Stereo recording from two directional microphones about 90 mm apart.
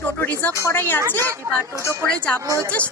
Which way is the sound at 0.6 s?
20° left (ahead or behind).